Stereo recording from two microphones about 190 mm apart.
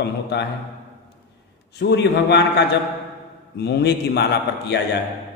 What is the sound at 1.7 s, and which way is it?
A man's voice, 60° left (ahead or behind).